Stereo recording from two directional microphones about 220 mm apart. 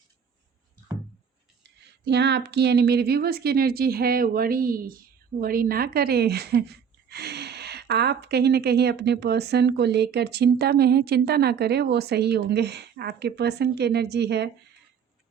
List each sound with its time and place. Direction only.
1.8 s speech: 50° right (ahead or behind)